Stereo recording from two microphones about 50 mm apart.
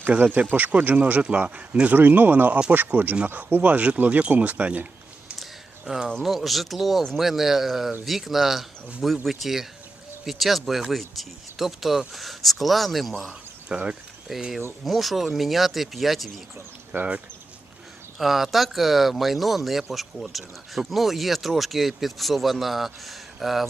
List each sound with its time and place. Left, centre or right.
0.1 s speech: right
5.4 s a sound: centre
6.2 s speech: centre
13.7 s speech: centre
14.3 s speech: centre
16.9 s speech: right
18.2 s speech: centre